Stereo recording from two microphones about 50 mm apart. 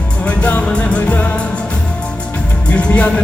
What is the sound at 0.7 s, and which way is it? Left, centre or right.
Music, left.